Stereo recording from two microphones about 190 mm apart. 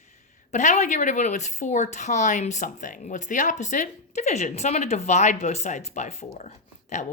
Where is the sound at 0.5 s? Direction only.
40° left (ahead or behind).